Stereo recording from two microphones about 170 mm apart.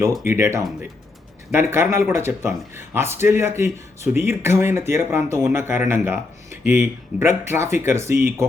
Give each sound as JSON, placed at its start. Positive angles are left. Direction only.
{"t": 0.0, "sound": "speech", "side_deg": -15}